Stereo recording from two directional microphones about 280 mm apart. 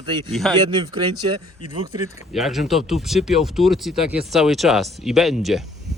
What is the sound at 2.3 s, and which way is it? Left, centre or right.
Speech, centre.